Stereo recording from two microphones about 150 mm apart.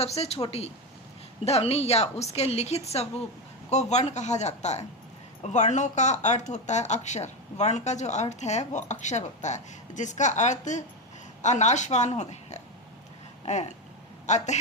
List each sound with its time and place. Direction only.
0.0 s a woman's voice: 45° left (ahead or behind)
13.4 s a sound: 50° left (ahead or behind)
14.3 s a woman's voice: 50° left (ahead or behind)